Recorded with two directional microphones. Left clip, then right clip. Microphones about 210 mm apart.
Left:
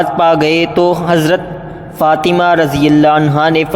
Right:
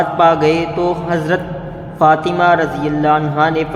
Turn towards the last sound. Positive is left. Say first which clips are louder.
# left 4 dB
turn(degrees=40)  # may be behind; listen again after turning